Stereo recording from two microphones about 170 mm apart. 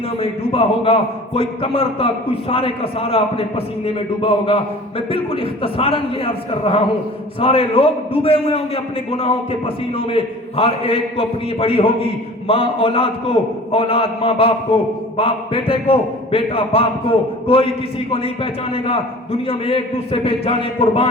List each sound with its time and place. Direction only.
0.2 s a man's voice: 35° left (ahead or behind)
18.7 s a man's voice: 35° left (ahead or behind)